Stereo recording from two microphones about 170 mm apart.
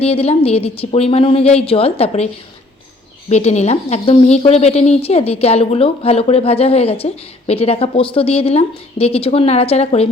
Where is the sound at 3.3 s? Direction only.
40° left (ahead or behind).